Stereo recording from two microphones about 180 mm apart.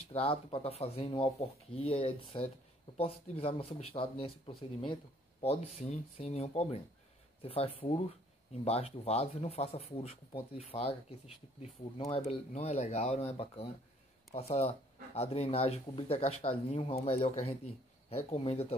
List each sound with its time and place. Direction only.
0.1 s speech: 35° left (ahead or behind)
5.5 s speech: 40° left (ahead or behind)